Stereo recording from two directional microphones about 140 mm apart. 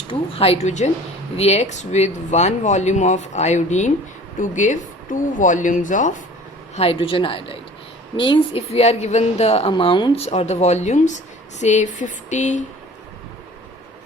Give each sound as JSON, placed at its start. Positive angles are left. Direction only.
{"t": 0.1, "sound": "a woman's voice", "side_deg": 45}
{"t": 6.7, "sound": "a woman's voice", "side_deg": 40}
{"t": 10.2, "sound": "speech", "side_deg": 50}